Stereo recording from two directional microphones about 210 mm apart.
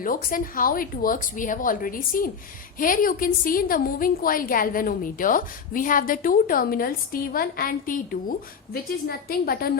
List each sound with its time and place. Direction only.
0.0 s a woman's voice: 40° left (ahead or behind)